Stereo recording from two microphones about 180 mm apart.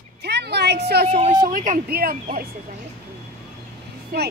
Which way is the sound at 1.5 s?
45° right (ahead or behind).